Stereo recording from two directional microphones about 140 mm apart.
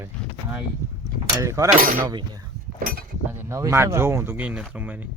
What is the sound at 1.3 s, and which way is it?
Speech, 20° right (ahead or behind).